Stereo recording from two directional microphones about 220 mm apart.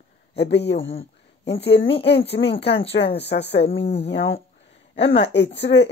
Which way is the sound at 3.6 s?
25° left (ahead or behind).